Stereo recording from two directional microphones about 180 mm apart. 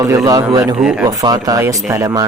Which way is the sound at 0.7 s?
5° right (ahead or behind).